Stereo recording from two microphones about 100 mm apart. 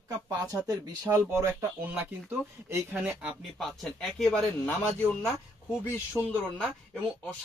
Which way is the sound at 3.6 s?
Centre (ahead or behind).